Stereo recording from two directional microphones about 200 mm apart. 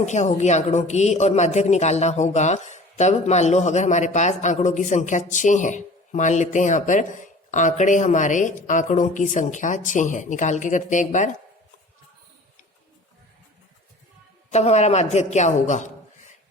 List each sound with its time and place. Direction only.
0.0 s a man's voice: 35° left (ahead or behind)
14.5 s a man's voice: 35° left (ahead or behind)